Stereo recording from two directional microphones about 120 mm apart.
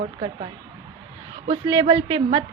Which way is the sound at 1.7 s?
35° right (ahead or behind).